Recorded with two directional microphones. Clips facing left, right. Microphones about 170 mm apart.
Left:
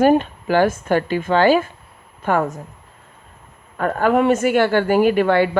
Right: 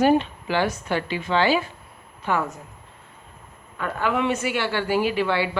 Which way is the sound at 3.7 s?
45° left (ahead or behind).